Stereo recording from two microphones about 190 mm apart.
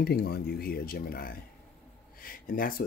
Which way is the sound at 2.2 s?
50° left (ahead or behind).